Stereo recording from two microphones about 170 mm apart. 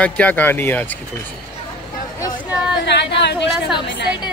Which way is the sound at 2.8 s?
90° left.